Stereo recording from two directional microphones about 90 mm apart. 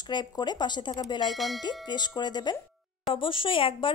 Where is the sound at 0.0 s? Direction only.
55° left (ahead or behind).